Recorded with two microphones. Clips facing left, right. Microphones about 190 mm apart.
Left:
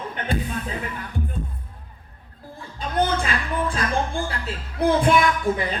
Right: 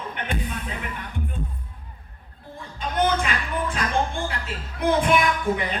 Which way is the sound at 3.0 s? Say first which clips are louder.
Even; 35° left (ahead or behind).